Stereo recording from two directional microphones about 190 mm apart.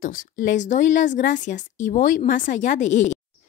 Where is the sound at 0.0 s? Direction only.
45° left (ahead or behind).